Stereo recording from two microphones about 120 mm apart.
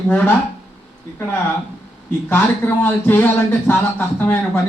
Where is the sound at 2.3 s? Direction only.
15° left (ahead or behind).